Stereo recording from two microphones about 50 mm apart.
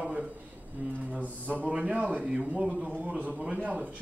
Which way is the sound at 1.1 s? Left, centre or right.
Right.